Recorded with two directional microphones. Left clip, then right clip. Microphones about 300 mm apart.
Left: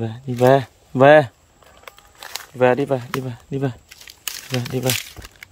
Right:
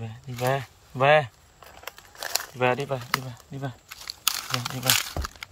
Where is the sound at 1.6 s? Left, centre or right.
Right.